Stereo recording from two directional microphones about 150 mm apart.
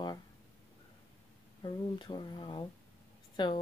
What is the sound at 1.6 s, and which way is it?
Speech, 30° left (ahead or behind).